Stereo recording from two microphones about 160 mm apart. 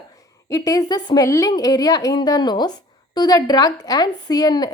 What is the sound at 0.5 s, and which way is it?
A woman's voice, 20° left (ahead or behind).